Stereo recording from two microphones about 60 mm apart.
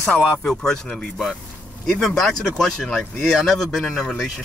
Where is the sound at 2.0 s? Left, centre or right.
Centre.